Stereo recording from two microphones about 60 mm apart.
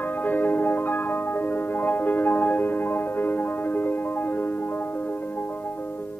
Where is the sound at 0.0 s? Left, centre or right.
Left.